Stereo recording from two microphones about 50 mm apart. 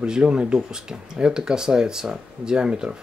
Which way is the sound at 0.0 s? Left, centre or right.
Right.